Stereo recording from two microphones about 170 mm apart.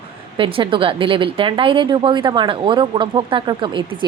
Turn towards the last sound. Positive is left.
turn(degrees=-30)  # may be behind; listen again after turning